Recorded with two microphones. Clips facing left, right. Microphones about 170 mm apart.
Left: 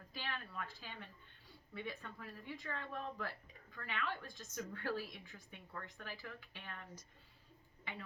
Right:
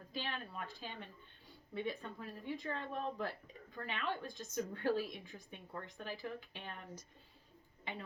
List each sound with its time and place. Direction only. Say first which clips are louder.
0.1 s a sound: right 4 dB; 25° right (ahead or behind)
0.8 s speech: right 4 dB; 25° right (ahead or behind)
7.9 s speech: right 4 dB; 20° right (ahead or behind)